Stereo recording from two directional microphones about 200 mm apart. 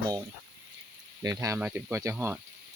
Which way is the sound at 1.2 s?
15° right (ahead or behind).